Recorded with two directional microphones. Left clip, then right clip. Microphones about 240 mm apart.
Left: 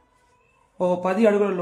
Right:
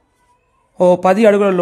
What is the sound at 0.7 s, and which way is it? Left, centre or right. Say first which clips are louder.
Speech: right 11 dB; right.